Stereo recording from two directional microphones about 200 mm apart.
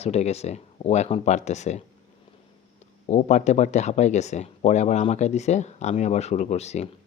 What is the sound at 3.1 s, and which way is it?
Speech, 35° left (ahead or behind).